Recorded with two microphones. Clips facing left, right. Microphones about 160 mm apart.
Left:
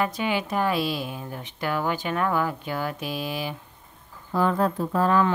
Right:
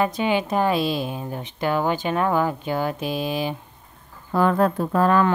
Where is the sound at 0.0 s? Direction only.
25° right (ahead or behind).